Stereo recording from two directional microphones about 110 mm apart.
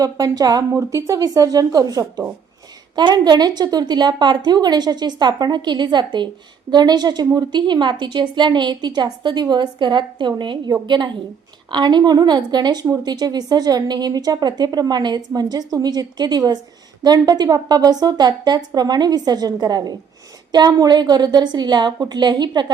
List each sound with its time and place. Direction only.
0.0 s a woman's voice: 35° right (ahead or behind)